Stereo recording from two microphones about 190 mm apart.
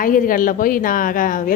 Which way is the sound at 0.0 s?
45° left (ahead or behind).